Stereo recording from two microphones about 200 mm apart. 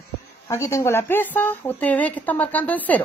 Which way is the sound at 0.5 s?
15° left (ahead or behind).